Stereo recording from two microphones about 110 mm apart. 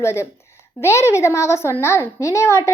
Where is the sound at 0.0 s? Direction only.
25° left (ahead or behind).